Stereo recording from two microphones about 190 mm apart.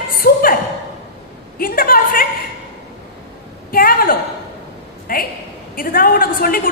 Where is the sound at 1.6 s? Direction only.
50° left (ahead or behind).